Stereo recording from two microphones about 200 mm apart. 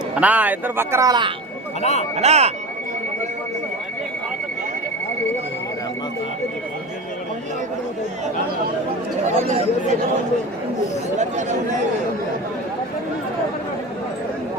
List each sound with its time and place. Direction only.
0.2 s a man's voice: 5° right (ahead or behind)
1.8 s speech: 35° left (ahead or behind)
2.1 s speech: 30° right (ahead or behind)
9.2 s speech: 30° right (ahead or behind)
11.2 s speech: 35° right (ahead or behind)